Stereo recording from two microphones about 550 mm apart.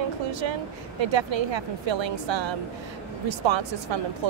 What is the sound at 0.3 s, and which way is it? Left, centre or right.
Speech, right.